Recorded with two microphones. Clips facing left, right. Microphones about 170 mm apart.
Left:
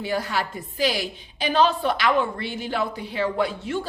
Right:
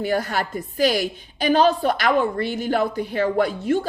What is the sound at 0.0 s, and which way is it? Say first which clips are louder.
A woman's voice: right 3 dB; 50° right (ahead or behind).